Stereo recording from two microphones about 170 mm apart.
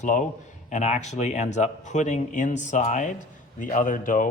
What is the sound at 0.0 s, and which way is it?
A man's voice, 45° left (ahead or behind).